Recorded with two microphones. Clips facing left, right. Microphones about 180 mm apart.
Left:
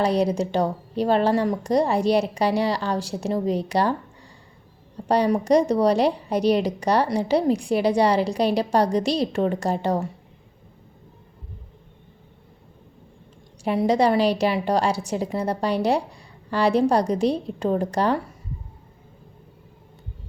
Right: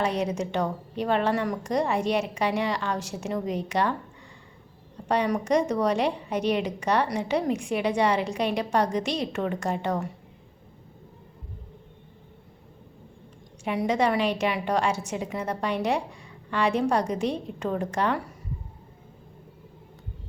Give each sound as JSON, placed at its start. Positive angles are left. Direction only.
{"t": 0.0, "sound": "a woman's voice", "side_deg": 35}
{"t": 5.0, "sound": "a woman's voice", "side_deg": 35}
{"t": 13.7, "sound": "a woman's voice", "side_deg": 35}